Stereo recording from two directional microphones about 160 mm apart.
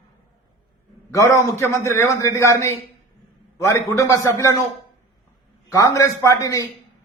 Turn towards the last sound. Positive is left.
turn(degrees=20)  # may be behind; listen again after turning